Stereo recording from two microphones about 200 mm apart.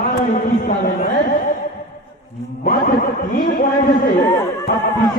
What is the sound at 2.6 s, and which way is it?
Speech, 50° left (ahead or behind).